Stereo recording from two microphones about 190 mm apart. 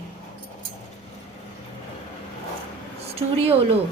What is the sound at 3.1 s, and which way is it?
Speech, 30° right (ahead or behind).